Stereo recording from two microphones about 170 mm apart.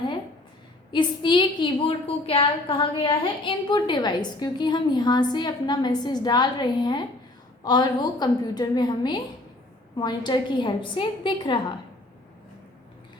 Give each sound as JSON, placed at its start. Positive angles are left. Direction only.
{"t": 0.9, "sound": "a woman's voice", "side_deg": 25}